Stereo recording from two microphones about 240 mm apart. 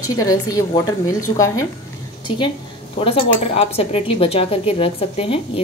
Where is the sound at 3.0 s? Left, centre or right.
Left.